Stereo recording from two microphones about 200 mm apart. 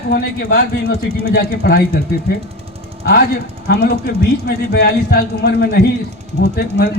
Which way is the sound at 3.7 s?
50° left (ahead or behind).